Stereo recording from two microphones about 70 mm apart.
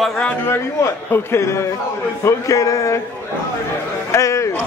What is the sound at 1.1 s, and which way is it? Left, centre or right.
Speech, left.